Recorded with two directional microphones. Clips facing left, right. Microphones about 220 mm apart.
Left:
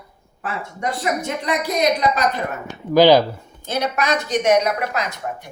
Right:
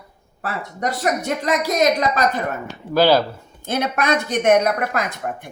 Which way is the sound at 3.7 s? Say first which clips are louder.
Right 1 dB; 55° right (ahead or behind).